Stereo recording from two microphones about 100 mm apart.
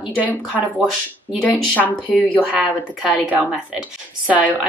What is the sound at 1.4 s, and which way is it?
Speech, 15° left (ahead or behind).